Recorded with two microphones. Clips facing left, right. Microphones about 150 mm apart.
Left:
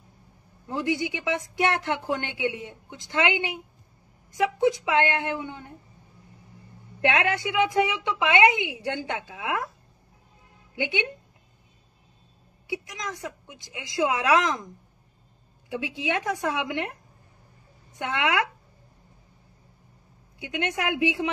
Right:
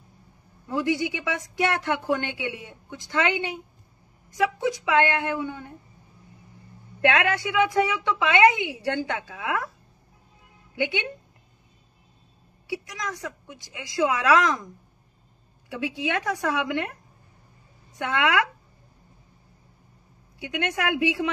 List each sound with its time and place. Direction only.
0.7 s a woman's voice: 20° left (ahead or behind)
7.0 s a woman's voice: 15° left (ahead or behind)
10.8 s a woman's voice: 15° left (ahead or behind)
12.6 s a woman's voice: 20° left (ahead or behind)
16.0 s a woman's voice: 15° left (ahead or behind)
17.9 s a woman's voice: 20° left (ahead or behind)
20.3 s a woman's voice: 20° left (ahead or behind)